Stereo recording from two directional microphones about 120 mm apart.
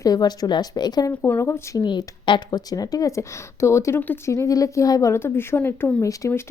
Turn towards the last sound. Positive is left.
turn(degrees=25)  # may be behind; listen again after turning